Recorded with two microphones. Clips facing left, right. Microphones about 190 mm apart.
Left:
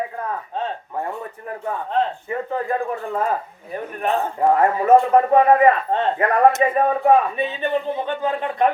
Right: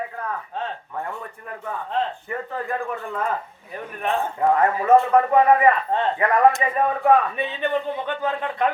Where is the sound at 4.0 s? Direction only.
35° left (ahead or behind).